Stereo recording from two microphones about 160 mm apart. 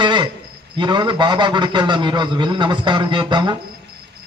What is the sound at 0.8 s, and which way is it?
A man's voice, 30° right (ahead or behind).